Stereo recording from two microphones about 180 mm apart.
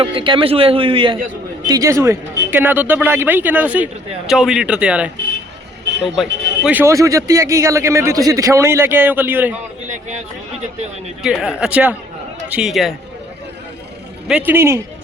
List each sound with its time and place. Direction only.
0.0 s a man's voice: 30° right (ahead or behind); by 5.1 s 5° right (ahead or behind)
6.1 s a man's voice: 5° right (ahead or behind)
11.2 s speech: 5° right (ahead or behind)
14.3 s a man's voice: 10° right (ahead or behind)